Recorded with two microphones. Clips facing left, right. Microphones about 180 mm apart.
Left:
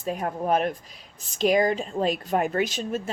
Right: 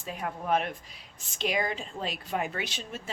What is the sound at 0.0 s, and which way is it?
A woman's voice, 45° left (ahead or behind).